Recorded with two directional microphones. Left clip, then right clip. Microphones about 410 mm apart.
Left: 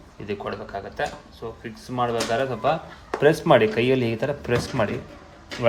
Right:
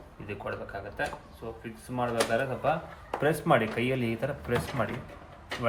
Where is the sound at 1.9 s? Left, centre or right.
Left.